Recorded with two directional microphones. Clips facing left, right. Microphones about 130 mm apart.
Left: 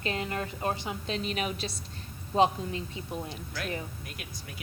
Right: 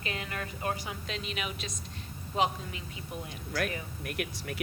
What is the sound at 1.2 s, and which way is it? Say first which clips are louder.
A woman's voice: left 5 dB; 40° left (ahead or behind).